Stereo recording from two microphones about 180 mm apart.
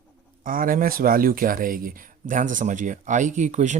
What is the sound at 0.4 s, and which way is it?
Speech, 50° right (ahead or behind).